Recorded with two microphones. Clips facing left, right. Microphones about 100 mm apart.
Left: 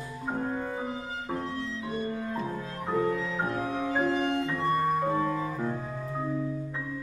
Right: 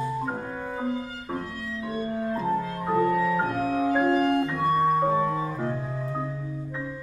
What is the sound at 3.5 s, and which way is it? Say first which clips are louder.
Organ: right 5 dB; 25° left (ahead or behind).